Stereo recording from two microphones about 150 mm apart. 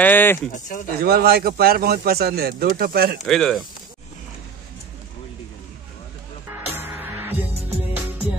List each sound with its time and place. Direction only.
0.0 s speech: 15° left (ahead or behind)
0.5 s speech: 60° left (ahead or behind)
0.9 s speech: 90° right
3.3 s speech: centre (ahead or behind)
6.7 s music: 15° right (ahead or behind)